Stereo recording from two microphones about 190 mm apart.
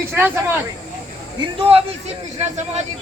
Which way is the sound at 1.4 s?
30° right (ahead or behind).